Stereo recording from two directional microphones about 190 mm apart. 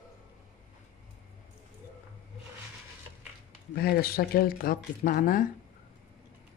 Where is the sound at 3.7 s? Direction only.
55° left (ahead or behind).